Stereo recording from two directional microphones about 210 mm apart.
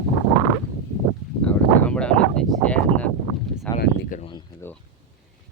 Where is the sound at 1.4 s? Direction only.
5° left (ahead or behind).